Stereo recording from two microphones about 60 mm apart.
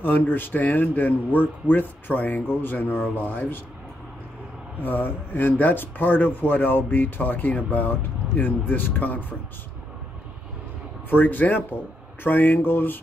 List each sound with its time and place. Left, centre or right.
0.0 s speech: left
4.7 s speech: left
11.1 s speech: left